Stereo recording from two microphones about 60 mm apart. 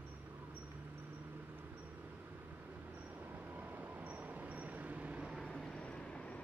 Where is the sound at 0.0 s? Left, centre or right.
Right.